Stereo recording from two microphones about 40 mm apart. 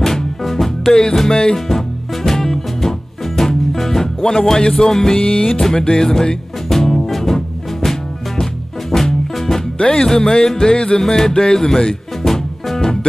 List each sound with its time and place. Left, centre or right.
0.0 s music: centre
0.9 s speech: centre
1.3 s music: left
2.2 s music: centre
4.6 s speech: centre
6.7 s music: centre
9.8 s speech: centre
10.2 s music: left
11.0 s speech: centre
12.2 s music: centre